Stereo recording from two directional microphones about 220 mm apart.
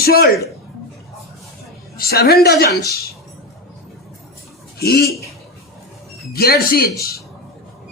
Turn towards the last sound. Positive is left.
turn(degrees=45)  # may be behind; listen again after turning